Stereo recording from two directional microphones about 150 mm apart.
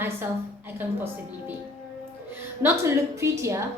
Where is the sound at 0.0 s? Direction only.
15° right (ahead or behind).